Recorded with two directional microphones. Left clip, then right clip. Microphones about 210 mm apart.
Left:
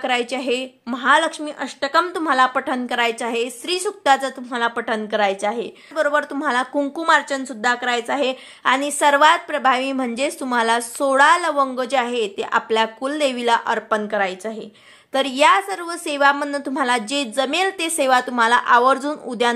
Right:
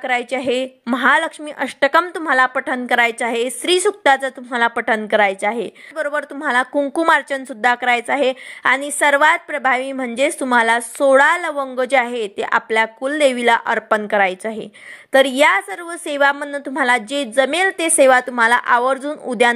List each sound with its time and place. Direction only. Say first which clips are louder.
0.0 s a woman's voice: right 2 dB; 20° right (ahead or behind)